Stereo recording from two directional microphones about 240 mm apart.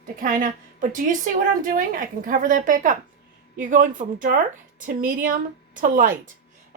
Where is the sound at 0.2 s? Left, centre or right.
Right.